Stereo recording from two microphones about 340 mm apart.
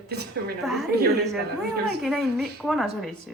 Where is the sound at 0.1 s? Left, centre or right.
Right.